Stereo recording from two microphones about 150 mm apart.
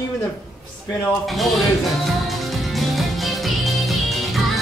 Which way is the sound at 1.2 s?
Centre (ahead or behind).